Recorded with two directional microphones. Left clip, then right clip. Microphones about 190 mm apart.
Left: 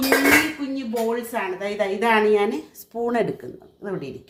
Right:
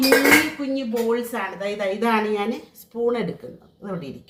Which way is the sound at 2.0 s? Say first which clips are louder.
Left 6 dB; 45° left (ahead or behind).